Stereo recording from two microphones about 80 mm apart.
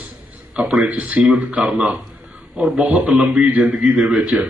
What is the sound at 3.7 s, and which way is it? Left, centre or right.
Speech, centre.